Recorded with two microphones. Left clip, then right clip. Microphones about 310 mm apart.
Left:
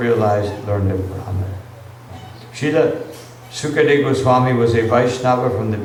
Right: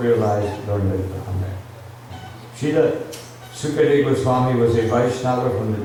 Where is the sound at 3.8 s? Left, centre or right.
Left.